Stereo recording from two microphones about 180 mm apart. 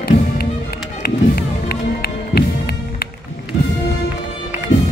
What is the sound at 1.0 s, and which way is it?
Music, 55° left (ahead or behind).